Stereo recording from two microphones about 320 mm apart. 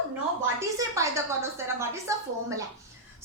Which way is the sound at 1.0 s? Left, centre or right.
Centre.